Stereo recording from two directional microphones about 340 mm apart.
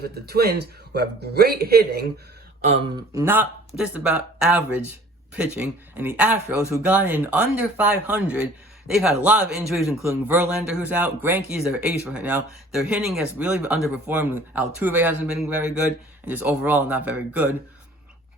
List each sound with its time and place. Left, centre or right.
0.0 s a man's voice: right
2.6 s a man's voice: centre